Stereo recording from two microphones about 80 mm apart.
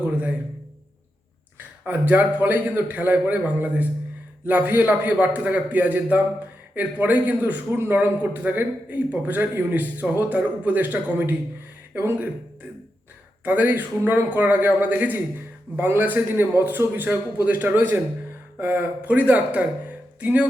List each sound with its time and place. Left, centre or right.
0.0 s a sound: centre
1.5 s a man's voice: right
13.4 s a man's voice: right